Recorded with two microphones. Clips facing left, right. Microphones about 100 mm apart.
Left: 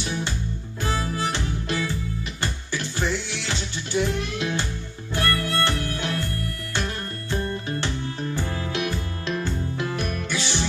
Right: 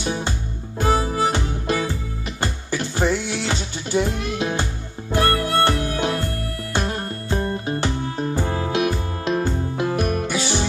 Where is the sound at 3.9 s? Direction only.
30° right (ahead or behind).